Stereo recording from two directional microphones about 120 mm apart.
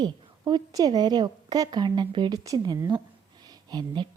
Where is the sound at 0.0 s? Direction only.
35° right (ahead or behind).